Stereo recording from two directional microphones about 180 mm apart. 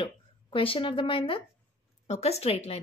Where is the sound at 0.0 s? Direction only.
30° left (ahead or behind).